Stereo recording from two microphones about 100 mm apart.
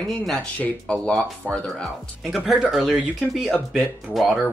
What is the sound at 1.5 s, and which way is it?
Speech, 20° right (ahead or behind).